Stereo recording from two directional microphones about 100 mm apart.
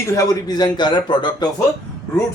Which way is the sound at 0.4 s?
40° left (ahead or behind).